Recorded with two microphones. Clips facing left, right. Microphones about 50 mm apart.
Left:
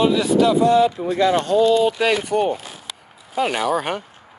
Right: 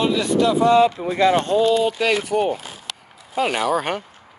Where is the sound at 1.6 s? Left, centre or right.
Centre.